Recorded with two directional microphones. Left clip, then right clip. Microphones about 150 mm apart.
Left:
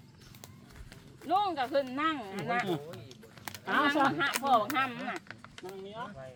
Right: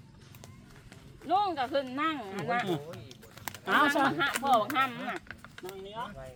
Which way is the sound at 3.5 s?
30° right (ahead or behind).